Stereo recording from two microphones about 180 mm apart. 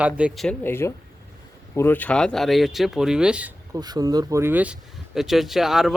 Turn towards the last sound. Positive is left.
turn(degrees=0)  # may be behind; listen again after turning